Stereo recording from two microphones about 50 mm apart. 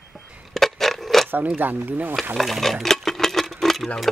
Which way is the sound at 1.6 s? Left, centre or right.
Right.